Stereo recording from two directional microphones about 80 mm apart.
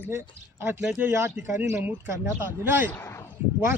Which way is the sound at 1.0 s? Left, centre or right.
Right.